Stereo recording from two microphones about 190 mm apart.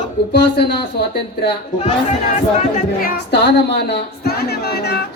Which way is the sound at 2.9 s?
55° left (ahead or behind).